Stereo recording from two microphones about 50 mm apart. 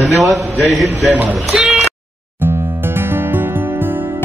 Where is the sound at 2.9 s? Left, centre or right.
Right.